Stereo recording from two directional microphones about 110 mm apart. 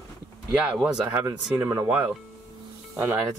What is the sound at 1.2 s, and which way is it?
Speech, 25° right (ahead or behind).